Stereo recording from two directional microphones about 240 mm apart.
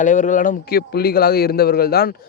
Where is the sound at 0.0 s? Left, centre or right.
Left.